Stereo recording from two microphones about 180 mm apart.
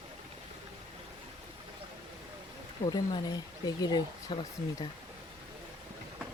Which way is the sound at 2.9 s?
20° left (ahead or behind).